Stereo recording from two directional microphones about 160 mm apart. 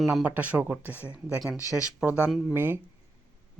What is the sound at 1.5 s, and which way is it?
Speech, 20° left (ahead or behind).